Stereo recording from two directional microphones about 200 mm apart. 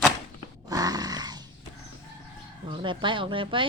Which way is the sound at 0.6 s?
20° right (ahead or behind).